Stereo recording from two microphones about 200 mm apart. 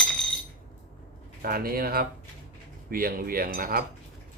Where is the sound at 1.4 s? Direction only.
45° right (ahead or behind).